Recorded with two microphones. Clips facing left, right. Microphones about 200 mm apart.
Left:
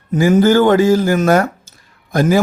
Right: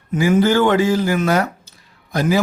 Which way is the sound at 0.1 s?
40° left (ahead or behind).